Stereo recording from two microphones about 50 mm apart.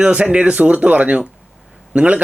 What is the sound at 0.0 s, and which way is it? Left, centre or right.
Speech, right.